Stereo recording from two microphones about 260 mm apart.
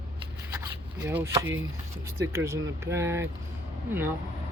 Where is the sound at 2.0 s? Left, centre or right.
Centre.